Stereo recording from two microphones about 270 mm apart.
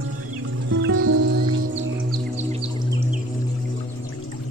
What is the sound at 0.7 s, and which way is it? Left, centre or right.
Music, right.